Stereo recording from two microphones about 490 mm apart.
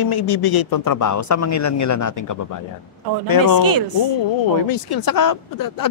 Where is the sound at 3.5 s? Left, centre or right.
Right.